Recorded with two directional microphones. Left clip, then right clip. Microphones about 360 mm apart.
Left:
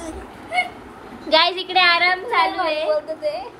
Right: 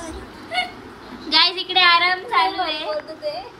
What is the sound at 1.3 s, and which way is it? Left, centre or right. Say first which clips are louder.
A woman's voice: left 1 dB; centre.